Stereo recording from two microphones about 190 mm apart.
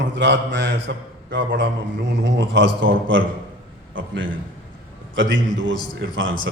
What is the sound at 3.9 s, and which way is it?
A man's voice, 85° right.